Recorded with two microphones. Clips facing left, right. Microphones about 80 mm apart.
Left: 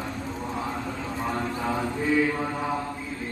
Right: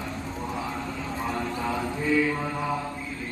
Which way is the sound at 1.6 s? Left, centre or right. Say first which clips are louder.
Left 2 dB; left.